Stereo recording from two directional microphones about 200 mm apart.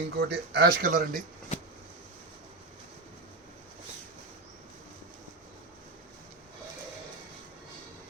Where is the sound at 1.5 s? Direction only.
35° left (ahead or behind).